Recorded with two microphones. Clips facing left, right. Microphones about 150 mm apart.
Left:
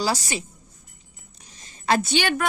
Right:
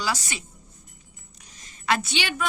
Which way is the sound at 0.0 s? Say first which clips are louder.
Left 4 dB; 35° left (ahead or behind).